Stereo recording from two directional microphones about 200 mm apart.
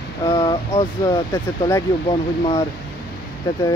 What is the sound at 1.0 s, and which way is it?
Speech, 15° left (ahead or behind).